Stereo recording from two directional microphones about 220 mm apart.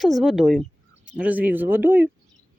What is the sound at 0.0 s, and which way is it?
Speech, centre (ahead or behind).